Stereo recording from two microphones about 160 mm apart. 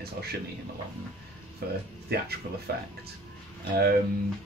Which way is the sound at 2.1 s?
75° right (ahead or behind).